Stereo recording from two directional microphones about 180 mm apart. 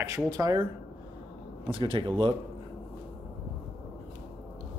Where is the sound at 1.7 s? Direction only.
30° right (ahead or behind).